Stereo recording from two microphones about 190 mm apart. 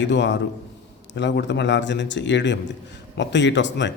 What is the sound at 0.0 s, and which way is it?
A man's voice, 70° left (ahead or behind).